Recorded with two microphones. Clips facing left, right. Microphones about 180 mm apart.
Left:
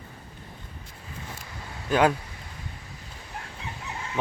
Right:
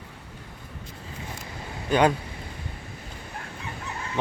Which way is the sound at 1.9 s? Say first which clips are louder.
Right 1 dB; 5° left (ahead or behind).